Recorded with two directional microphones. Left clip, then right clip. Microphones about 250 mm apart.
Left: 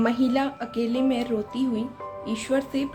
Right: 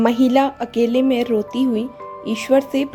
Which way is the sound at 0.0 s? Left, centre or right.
Right.